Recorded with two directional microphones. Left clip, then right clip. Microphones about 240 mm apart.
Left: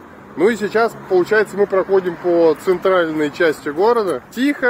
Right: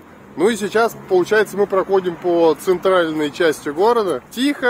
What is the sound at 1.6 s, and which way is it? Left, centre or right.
Speech, centre.